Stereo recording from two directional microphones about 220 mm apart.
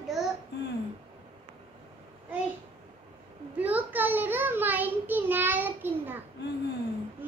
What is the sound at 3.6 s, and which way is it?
Child singing, 5° right (ahead or behind).